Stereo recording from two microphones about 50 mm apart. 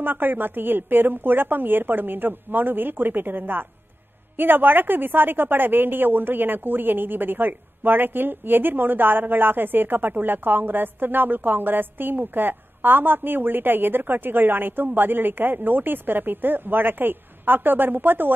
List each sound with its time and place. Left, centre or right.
0.0 s speech: right